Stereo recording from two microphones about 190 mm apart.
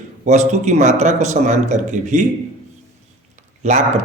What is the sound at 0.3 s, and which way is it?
A man's voice, 40° right (ahead or behind).